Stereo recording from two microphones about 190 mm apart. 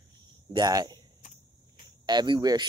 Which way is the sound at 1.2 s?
45° left (ahead or behind).